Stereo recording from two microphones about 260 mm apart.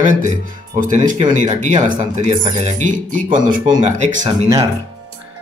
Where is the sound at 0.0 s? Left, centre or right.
Right.